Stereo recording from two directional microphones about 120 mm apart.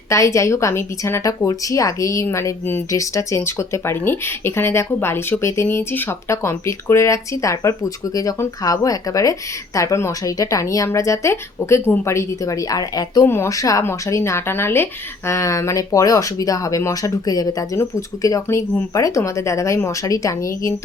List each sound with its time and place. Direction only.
0.1 s a woman's voice: 25° left (ahead or behind)